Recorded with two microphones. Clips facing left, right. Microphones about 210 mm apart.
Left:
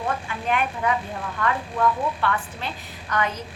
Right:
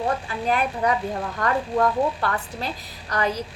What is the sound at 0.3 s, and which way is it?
A woman's voice, 35° right (ahead or behind).